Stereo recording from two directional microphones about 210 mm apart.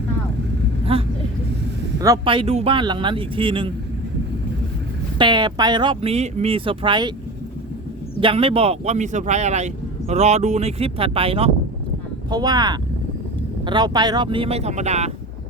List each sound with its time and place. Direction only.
0.9 s speech: 25° right (ahead or behind)
5.1 s speech: 20° right (ahead or behind)
8.2 s speech: 25° right (ahead or behind)